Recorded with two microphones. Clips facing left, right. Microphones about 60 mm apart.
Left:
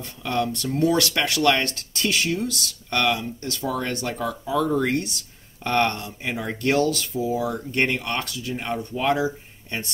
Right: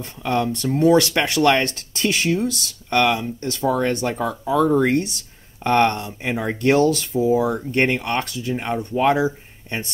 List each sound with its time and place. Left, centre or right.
0.0 s speech: right
4.8 s speech: right